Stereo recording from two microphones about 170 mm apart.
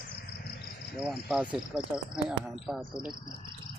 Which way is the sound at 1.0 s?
5° right (ahead or behind).